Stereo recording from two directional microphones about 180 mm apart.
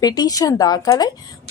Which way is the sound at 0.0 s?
20° left (ahead or behind).